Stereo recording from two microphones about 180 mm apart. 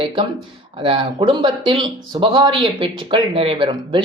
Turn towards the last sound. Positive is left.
turn(degrees=-30)  # may be behind; listen again after turning